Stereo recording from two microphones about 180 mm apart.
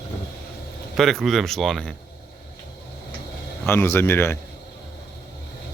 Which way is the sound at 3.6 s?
15° left (ahead or behind).